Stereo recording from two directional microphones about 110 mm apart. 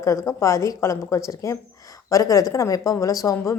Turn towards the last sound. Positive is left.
turn(degrees=30)  # may be behind; listen again after turning